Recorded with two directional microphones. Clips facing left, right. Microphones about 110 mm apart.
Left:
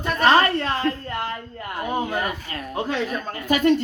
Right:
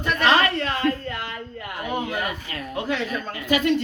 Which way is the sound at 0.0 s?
40° left (ahead or behind).